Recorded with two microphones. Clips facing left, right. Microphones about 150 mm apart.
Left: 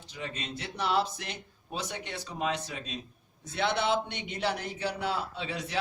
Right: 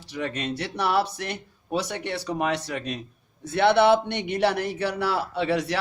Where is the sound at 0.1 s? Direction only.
65° right (ahead or behind).